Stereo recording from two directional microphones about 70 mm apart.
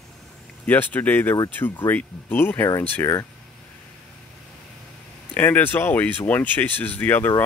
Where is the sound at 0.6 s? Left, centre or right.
Left.